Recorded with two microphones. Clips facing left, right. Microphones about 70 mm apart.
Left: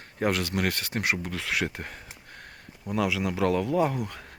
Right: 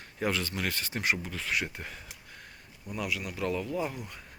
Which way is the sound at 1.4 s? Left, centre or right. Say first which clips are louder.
Left 3 dB; left.